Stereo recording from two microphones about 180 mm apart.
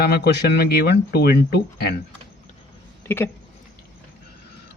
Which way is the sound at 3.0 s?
10° left (ahead or behind).